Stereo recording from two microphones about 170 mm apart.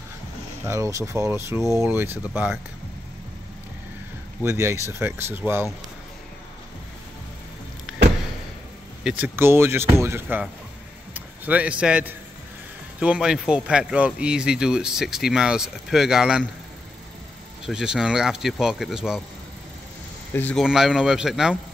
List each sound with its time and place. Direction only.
0.7 s speech: 20° right (ahead or behind)
4.4 s speech: 15° right (ahead or behind)
9.0 s a man's voice: 10° right (ahead or behind)
17.6 s speech: 5° right (ahead or behind)
20.3 s speech: 10° left (ahead or behind)
20.6 s speech: 5° right (ahead or behind)